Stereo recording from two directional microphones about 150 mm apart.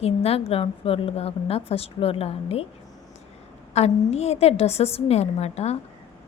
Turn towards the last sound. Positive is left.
turn(degrees=45)  # may be behind; listen again after turning